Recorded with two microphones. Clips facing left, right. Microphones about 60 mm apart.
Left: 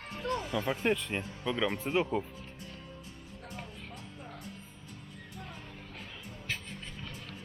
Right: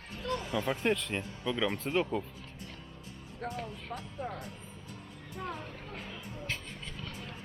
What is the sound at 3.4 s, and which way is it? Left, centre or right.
Speech, right.